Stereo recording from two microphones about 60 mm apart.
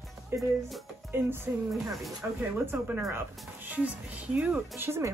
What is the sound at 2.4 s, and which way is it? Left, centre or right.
Speech, right.